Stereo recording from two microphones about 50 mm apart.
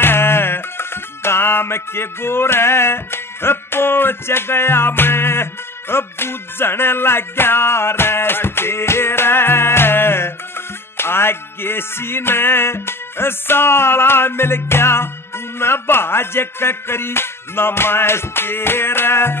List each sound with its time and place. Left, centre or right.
0.0 s music: left